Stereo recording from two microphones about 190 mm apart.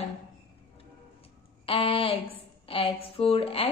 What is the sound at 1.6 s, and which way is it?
A woman's voice, 30° left (ahead or behind).